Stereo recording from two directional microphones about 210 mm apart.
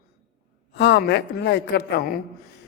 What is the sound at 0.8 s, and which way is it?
A man's voice, 55° left (ahead or behind).